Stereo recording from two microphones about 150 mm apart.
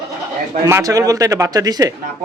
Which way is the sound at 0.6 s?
20° right (ahead or behind).